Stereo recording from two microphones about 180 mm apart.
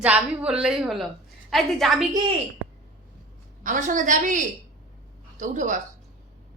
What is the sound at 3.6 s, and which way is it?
A woman's voice, 45° right (ahead or behind).